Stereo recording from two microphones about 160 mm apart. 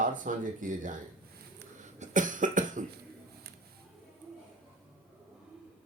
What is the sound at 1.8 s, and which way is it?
Cough, 50° right (ahead or behind).